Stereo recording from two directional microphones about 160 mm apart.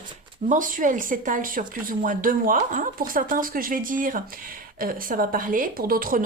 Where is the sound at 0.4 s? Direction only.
55° right (ahead or behind).